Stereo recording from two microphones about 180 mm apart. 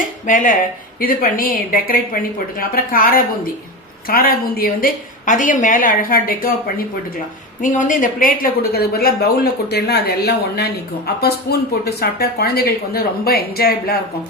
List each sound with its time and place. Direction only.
0.0 s a woman's voice: 50° left (ahead or behind)